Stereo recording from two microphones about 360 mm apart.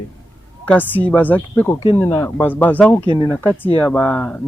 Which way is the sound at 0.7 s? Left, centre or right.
Centre.